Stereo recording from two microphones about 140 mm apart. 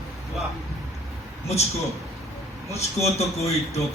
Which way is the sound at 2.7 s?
50° left (ahead or behind).